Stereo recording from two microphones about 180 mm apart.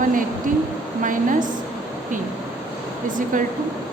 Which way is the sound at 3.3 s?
45° right (ahead or behind).